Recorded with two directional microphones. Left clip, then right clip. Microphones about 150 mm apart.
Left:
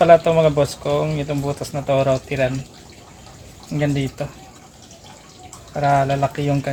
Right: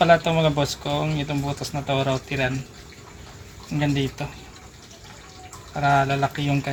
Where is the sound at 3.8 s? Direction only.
35° left (ahead or behind).